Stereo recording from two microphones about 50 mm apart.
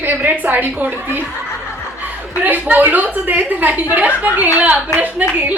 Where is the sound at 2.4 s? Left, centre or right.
Right.